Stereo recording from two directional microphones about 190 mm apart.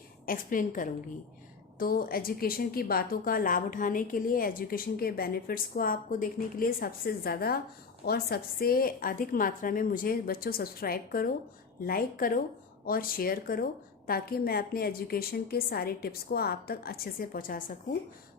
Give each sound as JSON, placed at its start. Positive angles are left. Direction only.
{"t": 0.3, "sound": "a woman's voice", "side_deg": 45}